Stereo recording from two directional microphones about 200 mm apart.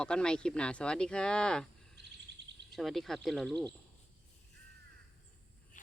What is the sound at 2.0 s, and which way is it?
Bird vocalization, 55° right (ahead or behind).